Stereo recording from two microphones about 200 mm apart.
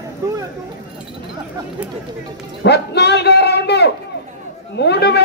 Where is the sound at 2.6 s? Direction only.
55° left (ahead or behind).